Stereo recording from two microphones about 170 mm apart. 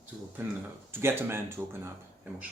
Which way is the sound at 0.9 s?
15° right (ahead or behind).